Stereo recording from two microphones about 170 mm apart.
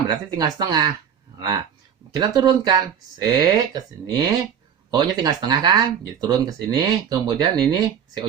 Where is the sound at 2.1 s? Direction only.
25° right (ahead or behind).